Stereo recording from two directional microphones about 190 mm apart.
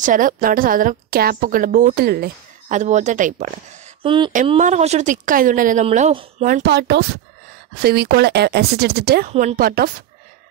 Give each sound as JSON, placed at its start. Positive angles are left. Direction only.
{"t": 0.0, "sound": "a woman's voice", "side_deg": -45}
{"t": 4.0, "sound": "speech", "side_deg": -25}
{"t": 4.5, "sound": "a woman's voice", "side_deg": -35}